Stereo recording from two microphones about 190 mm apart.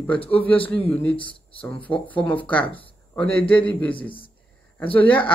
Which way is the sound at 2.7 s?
10° left (ahead or behind).